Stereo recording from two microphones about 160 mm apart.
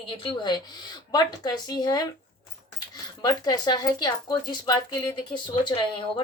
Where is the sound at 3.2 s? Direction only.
25° left (ahead or behind).